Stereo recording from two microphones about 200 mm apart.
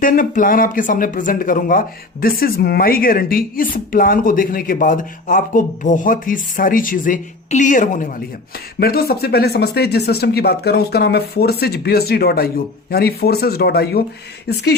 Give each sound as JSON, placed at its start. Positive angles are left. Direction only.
{"t": 0.0, "sound": "a woman's voice", "side_deg": 45}